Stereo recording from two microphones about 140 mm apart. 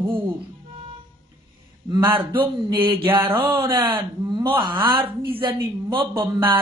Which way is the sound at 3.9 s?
30° right (ahead or behind).